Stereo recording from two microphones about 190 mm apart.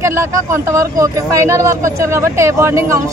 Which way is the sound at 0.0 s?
15° right (ahead or behind).